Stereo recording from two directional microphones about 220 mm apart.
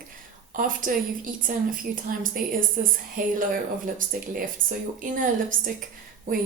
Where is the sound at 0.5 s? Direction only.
40° right (ahead or behind).